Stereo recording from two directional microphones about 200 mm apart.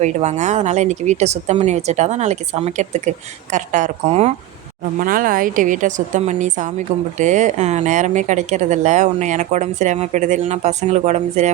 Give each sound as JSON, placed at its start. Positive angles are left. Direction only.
{"t": 0.0, "sound": "a woman's voice", "side_deg": -35}